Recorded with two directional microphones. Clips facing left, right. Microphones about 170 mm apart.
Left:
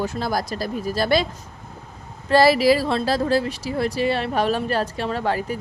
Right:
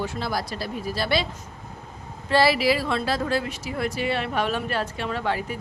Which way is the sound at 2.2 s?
40° left (ahead or behind).